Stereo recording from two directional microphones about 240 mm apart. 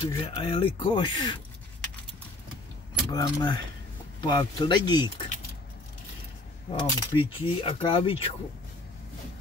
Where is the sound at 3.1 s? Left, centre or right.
Centre.